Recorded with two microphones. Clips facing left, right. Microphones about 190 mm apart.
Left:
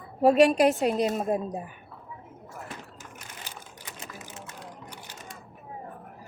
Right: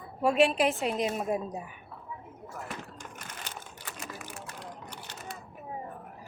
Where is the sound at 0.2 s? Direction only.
40° left (ahead or behind).